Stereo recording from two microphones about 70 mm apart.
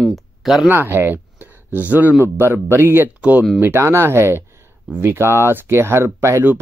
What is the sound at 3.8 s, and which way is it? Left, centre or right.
Speech, right.